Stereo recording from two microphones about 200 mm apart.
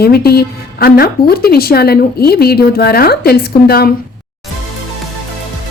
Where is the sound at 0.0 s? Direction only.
50° left (ahead or behind).